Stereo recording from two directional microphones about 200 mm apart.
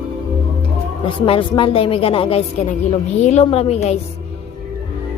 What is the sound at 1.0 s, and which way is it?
A woman's voice, 25° left (ahead or behind).